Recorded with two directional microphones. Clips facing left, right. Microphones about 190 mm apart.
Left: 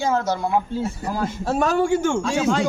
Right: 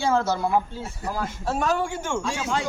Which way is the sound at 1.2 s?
35° left (ahead or behind).